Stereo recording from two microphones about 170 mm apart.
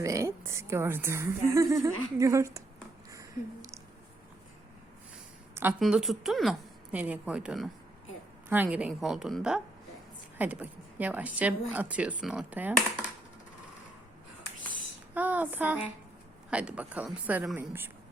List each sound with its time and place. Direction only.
0.0 s a woman's voice: 15° right (ahead or behind)
3.1 s a sound: 20° right (ahead or behind)
5.8 s a woman's voice: centre (ahead or behind)
15.1 s a woman's voice: 10° right (ahead or behind)